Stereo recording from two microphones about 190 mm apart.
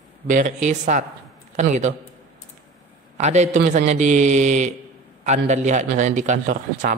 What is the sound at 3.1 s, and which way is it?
A man's voice, 40° right (ahead or behind).